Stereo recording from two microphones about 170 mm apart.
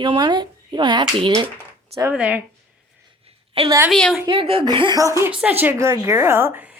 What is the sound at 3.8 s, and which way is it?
Speech, centre (ahead or behind).